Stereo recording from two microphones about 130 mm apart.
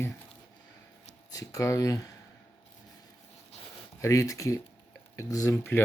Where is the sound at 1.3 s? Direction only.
25° left (ahead or behind).